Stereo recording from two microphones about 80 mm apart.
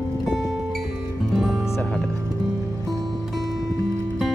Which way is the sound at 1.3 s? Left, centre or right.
Centre.